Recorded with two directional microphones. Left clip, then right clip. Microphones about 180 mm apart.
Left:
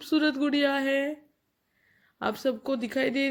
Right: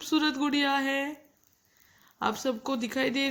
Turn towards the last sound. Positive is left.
turn(degrees=25)  # may be behind; listen again after turning